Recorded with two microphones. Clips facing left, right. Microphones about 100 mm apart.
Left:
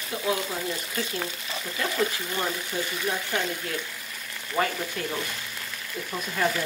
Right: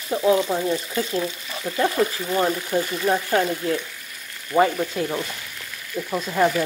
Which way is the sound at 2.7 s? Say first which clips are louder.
Right 8 dB; 45° right (ahead or behind).